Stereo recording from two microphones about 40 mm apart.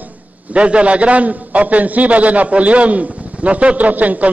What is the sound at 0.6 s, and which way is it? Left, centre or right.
A man's voice, right.